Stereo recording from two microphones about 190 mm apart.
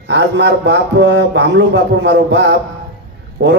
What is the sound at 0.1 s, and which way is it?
Speech, 65° right (ahead or behind).